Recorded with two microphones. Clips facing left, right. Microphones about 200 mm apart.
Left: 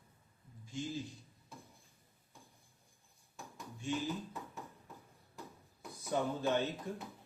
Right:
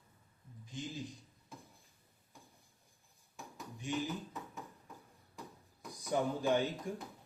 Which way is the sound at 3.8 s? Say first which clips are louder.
Even; 15° right (ahead or behind).